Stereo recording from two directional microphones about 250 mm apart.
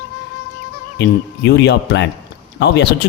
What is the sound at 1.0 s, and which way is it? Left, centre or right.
A man's voice, left.